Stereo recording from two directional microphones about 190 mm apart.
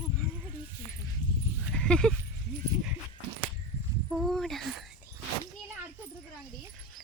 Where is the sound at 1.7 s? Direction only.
5° left (ahead or behind).